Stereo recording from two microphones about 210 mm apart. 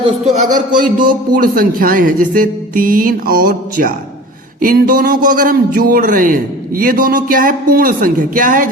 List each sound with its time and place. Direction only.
0.0 s a man's voice: 35° right (ahead or behind)